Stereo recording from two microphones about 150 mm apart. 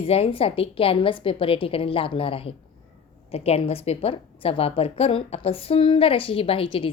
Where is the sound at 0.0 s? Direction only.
40° left (ahead or behind).